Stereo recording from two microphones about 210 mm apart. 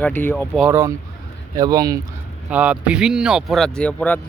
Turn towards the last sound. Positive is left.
turn(degrees=5)  # may be behind; listen again after turning